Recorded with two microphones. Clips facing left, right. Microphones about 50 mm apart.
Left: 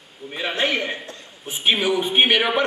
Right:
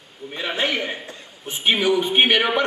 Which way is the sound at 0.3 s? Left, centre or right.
Centre.